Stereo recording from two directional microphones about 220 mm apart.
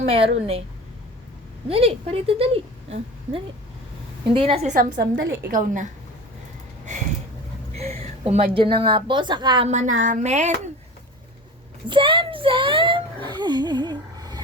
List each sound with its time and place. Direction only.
0.1 s a woman's voice: 25° right (ahead or behind)
1.6 s a woman's voice: 25° right (ahead or behind)
4.9 s a woman's voice: 50° right (ahead or behind)
5.5 s a woman's voice: 35° right (ahead or behind)
7.8 s a woman's voice: 25° right (ahead or behind)
11.9 s a woman's voice: 20° right (ahead or behind)
13.2 s a sound: 20° right (ahead or behind)